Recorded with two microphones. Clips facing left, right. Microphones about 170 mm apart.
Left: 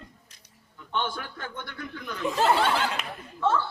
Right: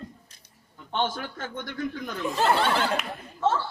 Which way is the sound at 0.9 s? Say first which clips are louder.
Right 3 dB; 45° right (ahead or behind).